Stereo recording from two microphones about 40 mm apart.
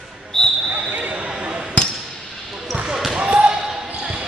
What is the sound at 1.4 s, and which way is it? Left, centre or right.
Basketball bounce, right.